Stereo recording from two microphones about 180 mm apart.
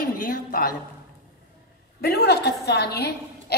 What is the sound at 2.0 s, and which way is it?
A woman's voice, 65° left (ahead or behind).